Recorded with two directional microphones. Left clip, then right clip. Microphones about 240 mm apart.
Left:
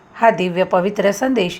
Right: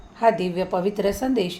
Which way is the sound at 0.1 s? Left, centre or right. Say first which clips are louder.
Left 5 dB; left.